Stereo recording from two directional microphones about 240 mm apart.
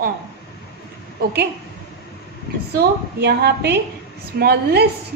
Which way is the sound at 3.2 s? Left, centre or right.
Right.